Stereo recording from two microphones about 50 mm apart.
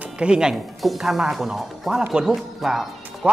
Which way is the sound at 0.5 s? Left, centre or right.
Centre.